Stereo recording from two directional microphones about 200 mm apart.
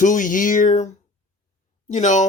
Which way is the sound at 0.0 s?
40° left (ahead or behind).